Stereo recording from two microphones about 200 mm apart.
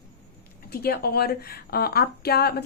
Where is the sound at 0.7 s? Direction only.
50° left (ahead or behind).